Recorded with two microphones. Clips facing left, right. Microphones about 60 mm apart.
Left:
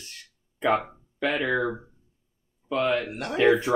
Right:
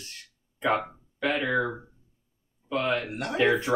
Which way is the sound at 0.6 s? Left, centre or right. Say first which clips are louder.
Left 2 dB; centre.